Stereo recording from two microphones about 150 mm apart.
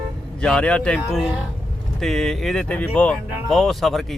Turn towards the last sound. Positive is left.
turn(degrees=0)  # may be behind; listen again after turning